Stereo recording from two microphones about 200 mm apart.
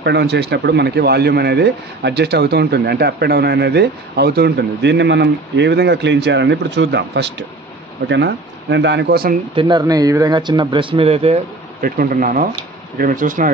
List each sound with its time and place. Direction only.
0.0 s speech: 55° right (ahead or behind)
9.6 s speech: 20° right (ahead or behind)
11.8 s speech: 45° right (ahead or behind)